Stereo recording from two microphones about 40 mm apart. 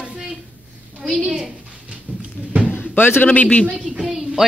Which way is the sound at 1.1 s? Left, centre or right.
Centre.